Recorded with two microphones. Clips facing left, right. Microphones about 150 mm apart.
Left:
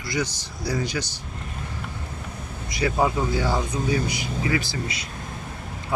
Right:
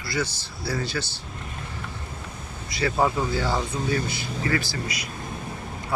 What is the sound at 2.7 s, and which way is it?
Speech, 20° left (ahead or behind).